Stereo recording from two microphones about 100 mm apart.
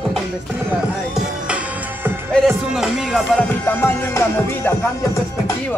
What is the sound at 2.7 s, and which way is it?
Music, 5° right (ahead or behind).